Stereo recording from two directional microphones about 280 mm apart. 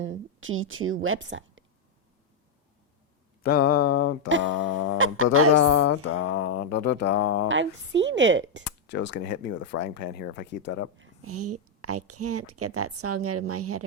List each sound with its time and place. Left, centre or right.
0.0 s a woman's voice: right
3.4 s speech: left
4.3 s a woman's voice: right
5.9 s mantra: left
6.5 s speech: left
7.4 s speech: right
8.6 s speech: left
10.9 s a woman's voice: right